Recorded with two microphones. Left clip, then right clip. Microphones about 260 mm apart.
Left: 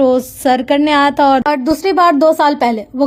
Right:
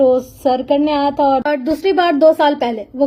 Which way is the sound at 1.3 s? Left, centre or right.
Left.